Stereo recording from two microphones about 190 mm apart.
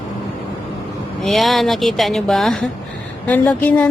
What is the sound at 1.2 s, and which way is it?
Speech, centre (ahead or behind).